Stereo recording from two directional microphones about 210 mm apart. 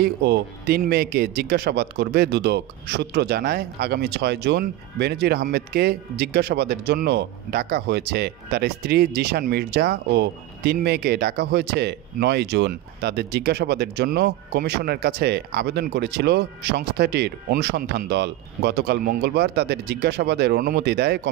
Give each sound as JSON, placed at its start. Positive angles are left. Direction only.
{"t": 0.0, "sound": "speech", "side_deg": -50}